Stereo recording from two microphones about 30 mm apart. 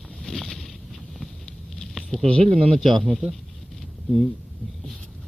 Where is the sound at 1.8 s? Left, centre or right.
Centre.